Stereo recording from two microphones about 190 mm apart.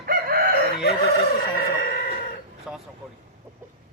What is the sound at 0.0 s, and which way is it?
Chicken, 55° right (ahead or behind).